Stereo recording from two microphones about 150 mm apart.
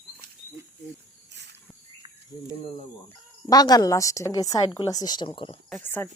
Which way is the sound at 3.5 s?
25° left (ahead or behind).